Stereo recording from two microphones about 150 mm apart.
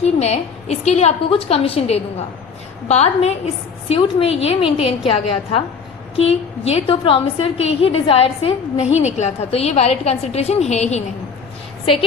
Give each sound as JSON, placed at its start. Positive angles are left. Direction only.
{"t": 0.0, "sound": "a woman's voice", "side_deg": 45}